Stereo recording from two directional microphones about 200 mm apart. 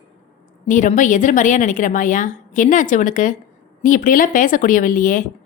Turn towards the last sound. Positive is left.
turn(degrees=40)  # may be behind; listen again after turning